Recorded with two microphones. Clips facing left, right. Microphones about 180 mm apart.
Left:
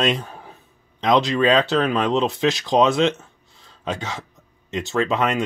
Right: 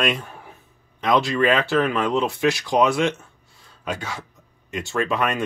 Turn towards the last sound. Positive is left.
turn(degrees=20)  # may be behind; listen again after turning